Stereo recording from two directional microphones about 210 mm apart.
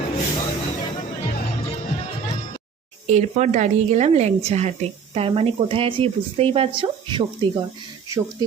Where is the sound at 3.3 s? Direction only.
35° right (ahead or behind).